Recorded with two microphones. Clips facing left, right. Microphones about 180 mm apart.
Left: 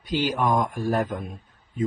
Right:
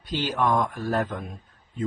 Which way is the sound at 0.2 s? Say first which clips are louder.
Left 1 dB; 10° left (ahead or behind).